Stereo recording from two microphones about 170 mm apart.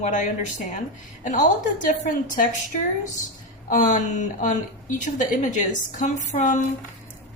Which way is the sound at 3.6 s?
50° left (ahead or behind).